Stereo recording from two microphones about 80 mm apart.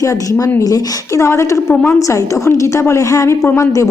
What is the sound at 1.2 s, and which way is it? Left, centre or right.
A woman's voice, left.